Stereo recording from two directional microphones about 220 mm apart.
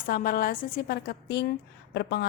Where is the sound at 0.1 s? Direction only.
40° left (ahead or behind).